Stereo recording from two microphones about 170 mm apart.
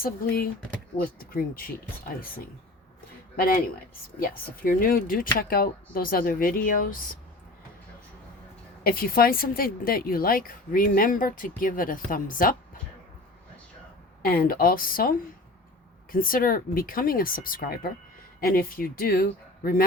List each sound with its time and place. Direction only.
1.2 s speech: 60° left (ahead or behind)
8.8 s speech: 60° left (ahead or behind)
14.2 s speech: 60° left (ahead or behind)
16.1 s speech: 55° left (ahead or behind)